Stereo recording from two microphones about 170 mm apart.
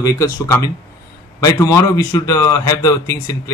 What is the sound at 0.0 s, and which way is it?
A man's voice, 20° left (ahead or behind).